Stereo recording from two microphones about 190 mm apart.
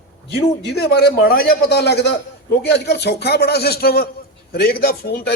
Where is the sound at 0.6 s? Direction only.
55° left (ahead or behind).